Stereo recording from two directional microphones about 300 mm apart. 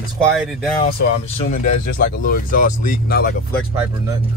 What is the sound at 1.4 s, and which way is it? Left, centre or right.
Speech, left.